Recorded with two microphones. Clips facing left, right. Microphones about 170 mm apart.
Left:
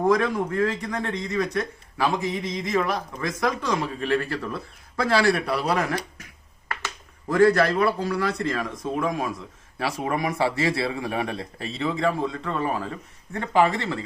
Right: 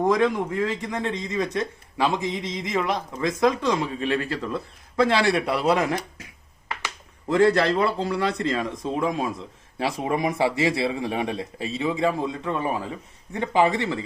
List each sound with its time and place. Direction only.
0.1 s a man's voice: 20° right (ahead or behind)
7.3 s a man's voice: 25° right (ahead or behind)